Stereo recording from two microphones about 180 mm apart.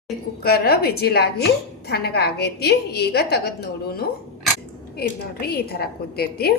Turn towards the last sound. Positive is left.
turn(degrees=60)  # may be behind; listen again after turning